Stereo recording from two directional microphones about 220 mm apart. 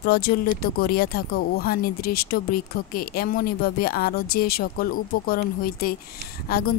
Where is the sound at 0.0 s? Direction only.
45° left (ahead or behind).